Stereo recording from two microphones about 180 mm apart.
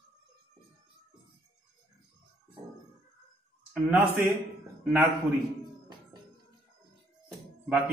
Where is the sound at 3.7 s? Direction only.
10° right (ahead or behind).